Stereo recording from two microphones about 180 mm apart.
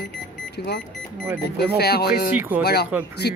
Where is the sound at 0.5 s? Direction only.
65° left (ahead or behind).